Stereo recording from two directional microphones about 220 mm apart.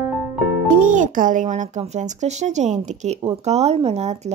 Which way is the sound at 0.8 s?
35° right (ahead or behind).